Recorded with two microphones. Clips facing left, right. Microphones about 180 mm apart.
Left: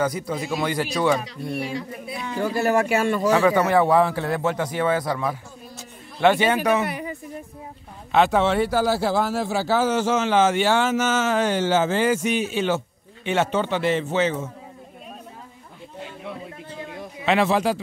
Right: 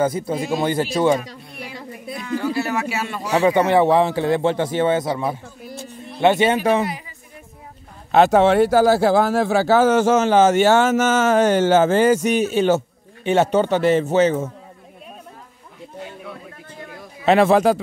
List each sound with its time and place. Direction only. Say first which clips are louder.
0.0 s speech: right 4 dB; 25° right (ahead or behind)
1.8 s speech: even; 50° right (ahead or behind)
2.4 s speech: left 4 dB; 50° left (ahead or behind)
3.3 s speech: right 6 dB; 20° right (ahead or behind)
6.9 s music: left 2 dB; 55° left (ahead or behind)
8.1 s speech: right 5 dB; 45° right (ahead or behind)
17.2 s a man's voice: right 6 dB; 45° right (ahead or behind)